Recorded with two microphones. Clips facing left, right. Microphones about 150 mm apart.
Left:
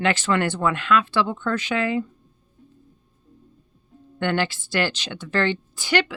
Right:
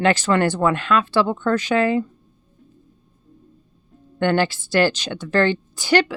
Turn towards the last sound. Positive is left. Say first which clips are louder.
# right 5 dB
turn(degrees=-35)  # may be behind; listen again after turning